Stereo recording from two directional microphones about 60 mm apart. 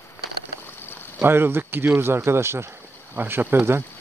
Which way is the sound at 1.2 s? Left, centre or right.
Right.